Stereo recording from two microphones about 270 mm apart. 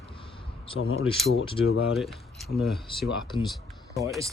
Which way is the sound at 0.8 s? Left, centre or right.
Left.